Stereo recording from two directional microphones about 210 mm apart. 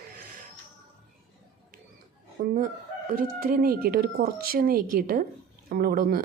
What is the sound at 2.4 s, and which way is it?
Speech, 40° right (ahead or behind).